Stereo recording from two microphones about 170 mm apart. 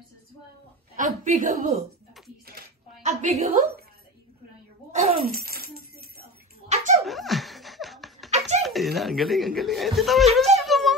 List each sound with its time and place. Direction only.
0.9 s a woman's voice: 50° right (ahead or behind)
3.0 s a woman's voice: 45° right (ahead or behind)
5.3 s music: 65° right (ahead or behind)
6.7 s dog: 45° right (ahead or behind)
7.1 s laughter: centre (ahead or behind)
8.3 s a sound: 40° right (ahead or behind)
8.6 s speech: centre (ahead or behind)
10.3 s a sound: centre (ahead or behind)